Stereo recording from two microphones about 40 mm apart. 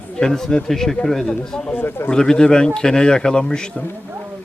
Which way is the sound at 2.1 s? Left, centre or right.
Centre.